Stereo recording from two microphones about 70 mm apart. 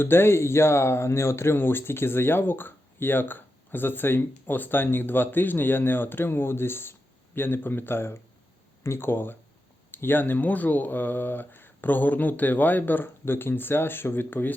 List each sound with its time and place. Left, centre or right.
0.0 s speech: left